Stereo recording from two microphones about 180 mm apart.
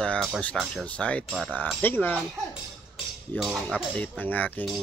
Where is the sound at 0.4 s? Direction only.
5° left (ahead or behind).